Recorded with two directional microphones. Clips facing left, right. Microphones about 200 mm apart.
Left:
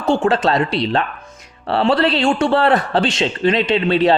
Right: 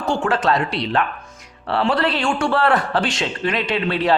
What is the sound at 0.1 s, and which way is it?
Speech, 25° left (ahead or behind).